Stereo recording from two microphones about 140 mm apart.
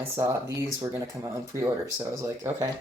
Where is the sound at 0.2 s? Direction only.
20° right (ahead or behind).